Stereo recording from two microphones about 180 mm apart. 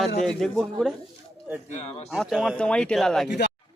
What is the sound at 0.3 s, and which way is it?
Speech, 5° left (ahead or behind).